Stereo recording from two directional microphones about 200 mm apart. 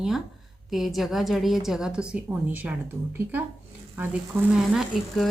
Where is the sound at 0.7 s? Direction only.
Centre (ahead or behind).